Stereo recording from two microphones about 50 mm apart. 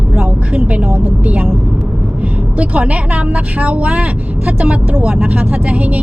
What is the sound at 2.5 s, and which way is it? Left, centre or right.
Speech, right.